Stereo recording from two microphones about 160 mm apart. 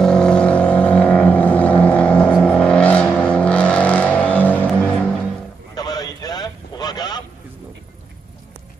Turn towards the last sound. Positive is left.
turn(degrees=25)  # may be behind; listen again after turning